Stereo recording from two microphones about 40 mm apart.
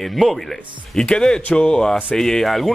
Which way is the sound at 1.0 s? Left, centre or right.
Left.